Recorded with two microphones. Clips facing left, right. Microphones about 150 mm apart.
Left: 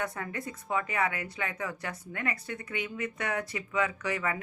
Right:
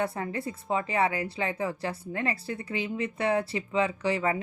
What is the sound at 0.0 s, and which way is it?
A woman's voice, 30° right (ahead or behind).